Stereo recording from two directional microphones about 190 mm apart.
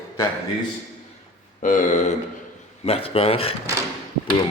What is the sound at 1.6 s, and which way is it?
Speech, 40° left (ahead or behind).